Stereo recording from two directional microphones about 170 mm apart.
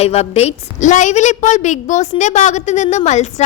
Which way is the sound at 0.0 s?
35° left (ahead or behind).